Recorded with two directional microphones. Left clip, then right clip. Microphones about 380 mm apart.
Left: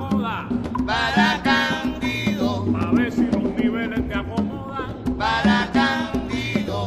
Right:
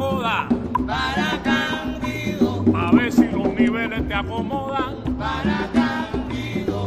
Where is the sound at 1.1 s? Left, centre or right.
Centre.